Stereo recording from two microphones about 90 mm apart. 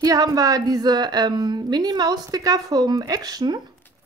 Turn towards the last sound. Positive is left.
turn(degrees=-50)  # may be behind; listen again after turning